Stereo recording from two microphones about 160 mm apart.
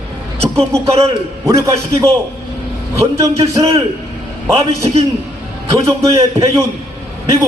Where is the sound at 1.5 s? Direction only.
20° right (ahead or behind).